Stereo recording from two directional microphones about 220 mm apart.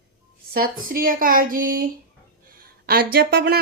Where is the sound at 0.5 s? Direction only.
40° right (ahead or behind).